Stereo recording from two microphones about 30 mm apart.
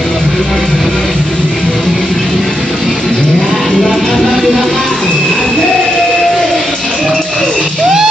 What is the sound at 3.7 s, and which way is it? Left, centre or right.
Music, left.